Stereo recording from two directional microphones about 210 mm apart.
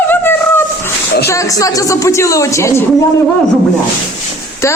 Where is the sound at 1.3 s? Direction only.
15° left (ahead or behind).